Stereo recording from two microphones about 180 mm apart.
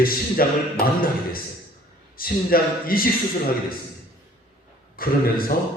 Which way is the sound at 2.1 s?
55° left (ahead or behind).